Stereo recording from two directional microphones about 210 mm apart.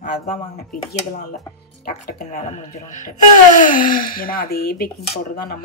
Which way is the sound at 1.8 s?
45° left (ahead or behind).